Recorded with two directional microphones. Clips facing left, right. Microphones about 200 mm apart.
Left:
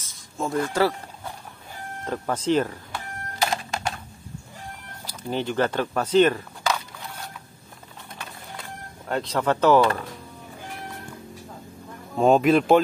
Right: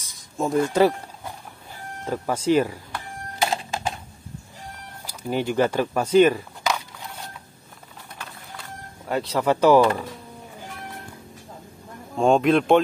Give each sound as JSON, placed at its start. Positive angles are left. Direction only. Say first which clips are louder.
{"t": 0.0, "sound": "a sound", "louder": "right 3 dB", "side_deg": -15}
{"t": 2.0, "sound": "speech", "louder": "right 2 dB", "side_deg": -10}
{"t": 3.3, "sound": "typing", "louder": "right 1 dB", "side_deg": -20}
{"t": 5.0, "sound": "speech", "louder": "right 2 dB", "side_deg": -10}
{"t": 9.0, "sound": "speech", "louder": "right 2 dB", "side_deg": -5}
{"t": 12.2, "sound": "speech", "louder": "even", "side_deg": 5}